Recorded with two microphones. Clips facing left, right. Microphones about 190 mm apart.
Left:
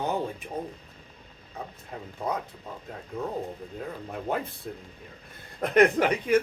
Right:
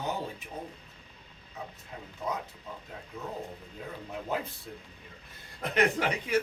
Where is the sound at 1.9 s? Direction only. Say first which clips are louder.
Left 7 dB; 50° left (ahead or behind).